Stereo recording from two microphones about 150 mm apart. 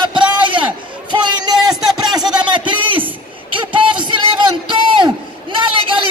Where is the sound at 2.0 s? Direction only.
25° right (ahead or behind).